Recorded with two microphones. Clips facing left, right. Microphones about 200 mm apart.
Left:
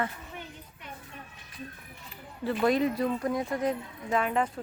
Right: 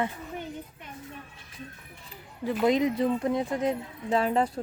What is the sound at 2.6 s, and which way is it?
Speech, 20° right (ahead or behind).